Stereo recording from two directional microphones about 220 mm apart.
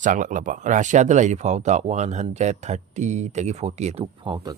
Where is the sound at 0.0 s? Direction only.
35° right (ahead or behind).